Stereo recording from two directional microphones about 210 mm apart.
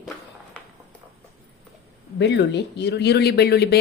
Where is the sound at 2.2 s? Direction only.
55° left (ahead or behind).